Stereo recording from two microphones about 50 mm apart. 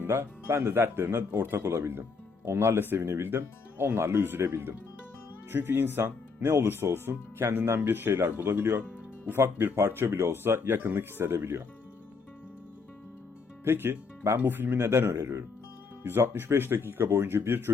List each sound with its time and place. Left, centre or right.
0.1 s speech: right
2.8 s speech: right
13.7 s speech: right
16.0 s speech: right